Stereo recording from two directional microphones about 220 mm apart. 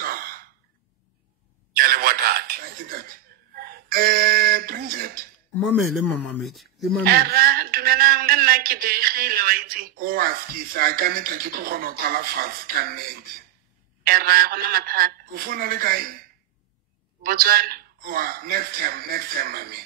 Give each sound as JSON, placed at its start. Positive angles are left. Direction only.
{"t": 0.1, "sound": "a sound", "side_deg": -40}
{"t": 1.8, "sound": "a sound", "side_deg": -40}
{"t": 3.5, "sound": "speech", "side_deg": -45}
{"t": 5.6, "sound": "speech", "side_deg": 0}
{"t": 7.1, "sound": "a man's voice", "side_deg": -45}
{"t": 17.2, "sound": "a man's voice", "side_deg": -40}